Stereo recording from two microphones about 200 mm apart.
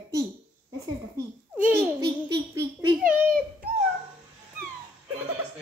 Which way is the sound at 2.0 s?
20° right (ahead or behind).